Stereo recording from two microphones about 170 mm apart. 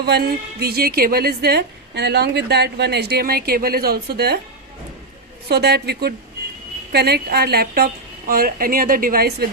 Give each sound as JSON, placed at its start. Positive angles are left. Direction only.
{"t": 0.0, "sound": "a woman's voice", "side_deg": -70}
{"t": 5.5, "sound": "a woman's voice", "side_deg": -75}